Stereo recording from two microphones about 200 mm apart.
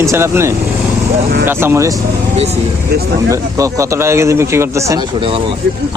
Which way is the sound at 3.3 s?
15° right (ahead or behind).